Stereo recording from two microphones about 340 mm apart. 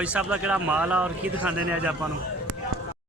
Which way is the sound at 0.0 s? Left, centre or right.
Centre.